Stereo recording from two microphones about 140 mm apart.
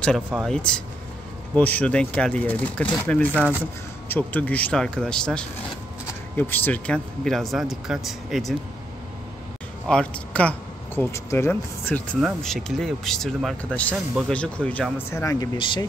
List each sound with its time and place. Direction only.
0.3 s speech: 5° left (ahead or behind)
9.8 s speech: 10° left (ahead or behind)
11.0 s speech: 20° left (ahead or behind)
12.4 s speech: centre (ahead or behind); by 15.5 s 20° left (ahead or behind)
15.5 s speech: 35° left (ahead or behind)